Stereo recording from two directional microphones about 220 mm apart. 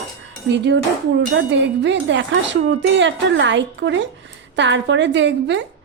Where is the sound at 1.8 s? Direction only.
55° right (ahead or behind).